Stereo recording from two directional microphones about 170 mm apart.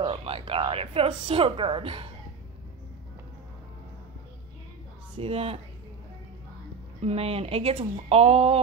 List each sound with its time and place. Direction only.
0.0 s speech: 35° right (ahead or behind)
5.1 s speech: 35° right (ahead or behind)
7.0 s speech: 35° right (ahead or behind)